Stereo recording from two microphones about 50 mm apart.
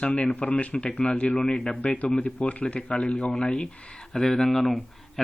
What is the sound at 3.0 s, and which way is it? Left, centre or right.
Speech, centre.